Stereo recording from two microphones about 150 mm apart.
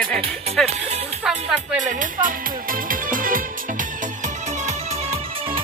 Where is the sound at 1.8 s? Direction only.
60° right (ahead or behind).